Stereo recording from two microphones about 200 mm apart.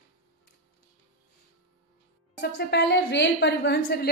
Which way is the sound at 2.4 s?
55° left (ahead or behind).